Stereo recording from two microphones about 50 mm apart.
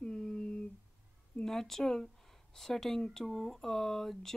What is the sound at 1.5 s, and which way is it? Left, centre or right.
Speech, centre.